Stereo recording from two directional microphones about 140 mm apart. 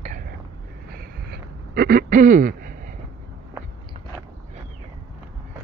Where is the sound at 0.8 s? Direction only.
90° right.